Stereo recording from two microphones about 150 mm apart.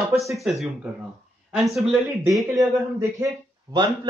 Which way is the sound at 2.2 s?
25° right (ahead or behind).